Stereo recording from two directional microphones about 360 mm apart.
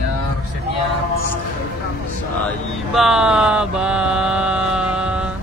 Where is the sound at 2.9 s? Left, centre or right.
Centre.